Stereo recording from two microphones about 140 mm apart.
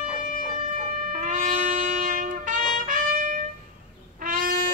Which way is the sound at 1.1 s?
60° right (ahead or behind).